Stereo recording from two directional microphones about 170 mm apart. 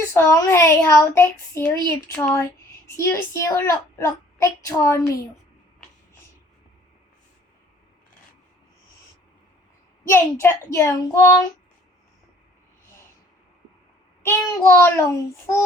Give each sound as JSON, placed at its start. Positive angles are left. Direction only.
{"t": 0.1, "sound": "a woman's voice", "side_deg": 15}
{"t": 10.1, "sound": "a woman's voice", "side_deg": 15}
{"t": 14.2, "sound": "a woman's voice", "side_deg": 15}